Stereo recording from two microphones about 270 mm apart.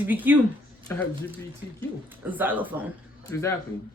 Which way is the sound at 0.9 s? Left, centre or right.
Centre.